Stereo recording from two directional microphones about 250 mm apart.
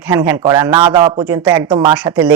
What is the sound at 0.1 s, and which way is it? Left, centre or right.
Speech, centre.